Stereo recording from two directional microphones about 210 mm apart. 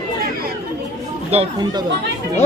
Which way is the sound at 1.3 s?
30° right (ahead or behind).